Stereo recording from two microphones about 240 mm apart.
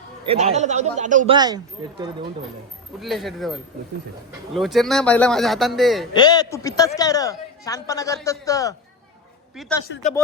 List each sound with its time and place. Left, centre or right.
0.3 s speech: right
1.3 s speech: centre
3.0 s a man's voice: centre
6.1 s a man's voice: centre
9.6 s a man's voice: centre